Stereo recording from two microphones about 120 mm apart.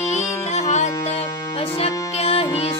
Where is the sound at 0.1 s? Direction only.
70° left (ahead or behind).